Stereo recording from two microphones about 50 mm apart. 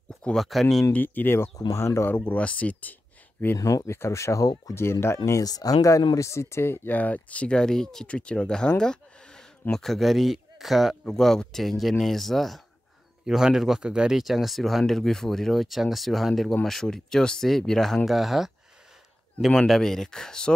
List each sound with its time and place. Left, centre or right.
0.4 s speech: centre
0.9 s speech: left
1.7 s speech: left
2.0 s speech: left
2.3 s speech: left
3.8 s speech: left
6.9 s speech: left; by 8.1 s centre
8.1 s speech: left; by 11.0 s centre
11.1 s speech: centre
13.3 s a man's voice: centre
14.1 s speech: centre
18.0 s speech: centre
19.7 s speech: centre